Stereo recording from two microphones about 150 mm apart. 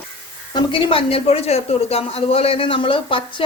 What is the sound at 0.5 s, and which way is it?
Speech, 35° left (ahead or behind).